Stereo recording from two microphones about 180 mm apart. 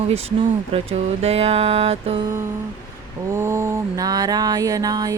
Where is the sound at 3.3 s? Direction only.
15° right (ahead or behind).